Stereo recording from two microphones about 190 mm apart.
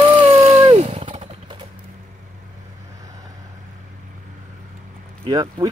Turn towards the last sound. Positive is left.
turn(degrees=-20)  # may be behind; listen again after turning